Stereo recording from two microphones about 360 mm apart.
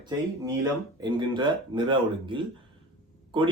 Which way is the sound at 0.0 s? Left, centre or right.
Centre.